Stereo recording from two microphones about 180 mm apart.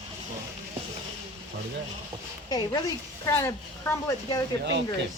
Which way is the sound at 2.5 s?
20° left (ahead or behind).